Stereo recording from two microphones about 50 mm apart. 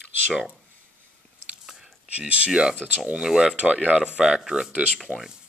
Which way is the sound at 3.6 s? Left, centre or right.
Right.